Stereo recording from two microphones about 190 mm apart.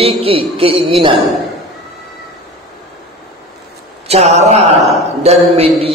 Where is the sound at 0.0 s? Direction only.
30° right (ahead or behind).